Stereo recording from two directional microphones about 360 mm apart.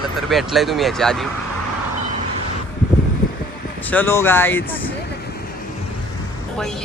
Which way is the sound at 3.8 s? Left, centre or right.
Centre.